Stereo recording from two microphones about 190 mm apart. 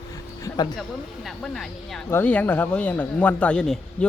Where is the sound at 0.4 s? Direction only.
20° left (ahead or behind).